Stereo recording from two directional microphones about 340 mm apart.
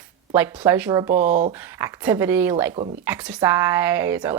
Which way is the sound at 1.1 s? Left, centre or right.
Right.